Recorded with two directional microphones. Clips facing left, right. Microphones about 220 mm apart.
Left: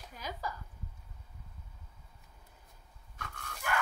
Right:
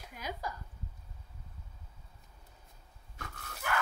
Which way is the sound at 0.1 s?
15° right (ahead or behind).